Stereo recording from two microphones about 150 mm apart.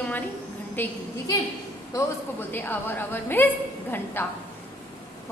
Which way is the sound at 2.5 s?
10° left (ahead or behind).